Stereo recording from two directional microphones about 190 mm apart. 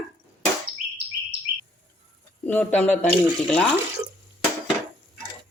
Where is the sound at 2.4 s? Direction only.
10° left (ahead or behind).